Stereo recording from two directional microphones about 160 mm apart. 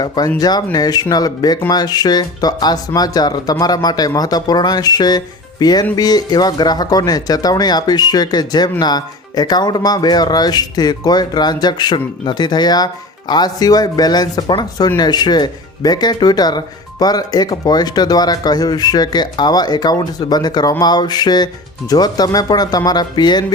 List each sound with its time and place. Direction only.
0.3 s speech: 25° left (ahead or behind)